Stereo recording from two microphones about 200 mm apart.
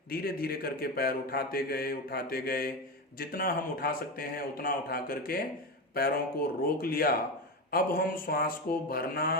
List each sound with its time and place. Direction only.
0.1 s a man's voice: 50° left (ahead or behind)